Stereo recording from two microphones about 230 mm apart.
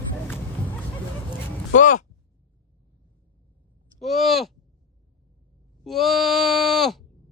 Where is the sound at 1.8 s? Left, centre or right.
Left.